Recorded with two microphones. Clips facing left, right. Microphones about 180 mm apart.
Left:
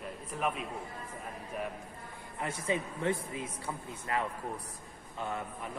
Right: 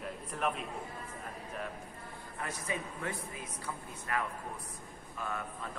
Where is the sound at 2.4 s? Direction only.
25° left (ahead or behind).